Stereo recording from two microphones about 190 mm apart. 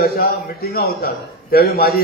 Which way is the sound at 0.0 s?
55° left (ahead or behind).